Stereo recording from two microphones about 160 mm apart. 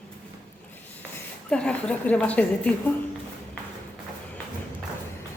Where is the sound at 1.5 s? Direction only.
5° left (ahead or behind).